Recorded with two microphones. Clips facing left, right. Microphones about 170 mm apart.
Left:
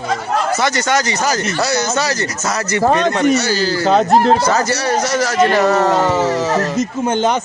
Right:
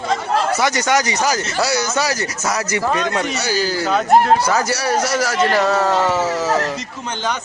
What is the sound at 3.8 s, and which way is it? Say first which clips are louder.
Speech: left 3 dB; 30° left (ahead or behind).